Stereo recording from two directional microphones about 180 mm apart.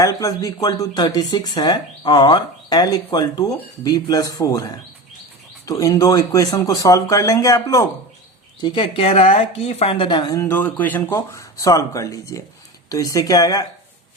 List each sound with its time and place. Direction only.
0.0 s speech: 20° left (ahead or behind)
8.6 s speech: 30° left (ahead or behind)
10.4 s speech: 15° left (ahead or behind)